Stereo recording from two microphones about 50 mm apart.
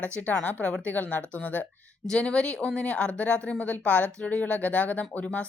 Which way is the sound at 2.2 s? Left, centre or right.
Left.